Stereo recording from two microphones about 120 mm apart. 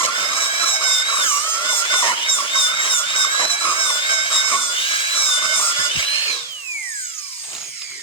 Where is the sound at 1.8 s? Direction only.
45° left (ahead or behind).